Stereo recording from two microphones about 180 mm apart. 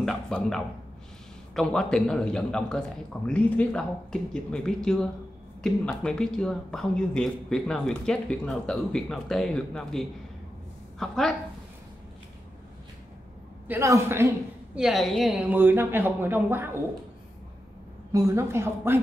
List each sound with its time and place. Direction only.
0.0 s speech: centre (ahead or behind)
13.7 s a woman's voice: 15° right (ahead or behind)
14.8 s a woman's voice: centre (ahead or behind)
18.1 s a woman's voice: 15° right (ahead or behind)